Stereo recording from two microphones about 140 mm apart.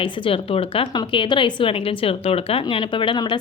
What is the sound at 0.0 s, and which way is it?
A woman's voice, 40° left (ahead or behind).